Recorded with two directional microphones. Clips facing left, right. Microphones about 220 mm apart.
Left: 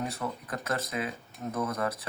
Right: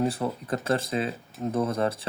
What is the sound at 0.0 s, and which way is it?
Speech, 30° right (ahead or behind).